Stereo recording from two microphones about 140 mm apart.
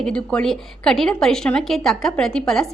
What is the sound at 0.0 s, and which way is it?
A woman's voice, 5° left (ahead or behind).